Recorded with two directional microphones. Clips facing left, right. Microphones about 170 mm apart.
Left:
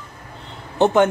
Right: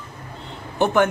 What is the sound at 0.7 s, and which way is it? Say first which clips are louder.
Speech: left 3 dB; 20° left (ahead or behind).